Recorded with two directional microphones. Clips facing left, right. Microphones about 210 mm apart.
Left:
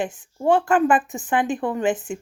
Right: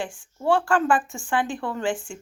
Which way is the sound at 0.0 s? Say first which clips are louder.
Left 4 dB; 20° left (ahead or behind).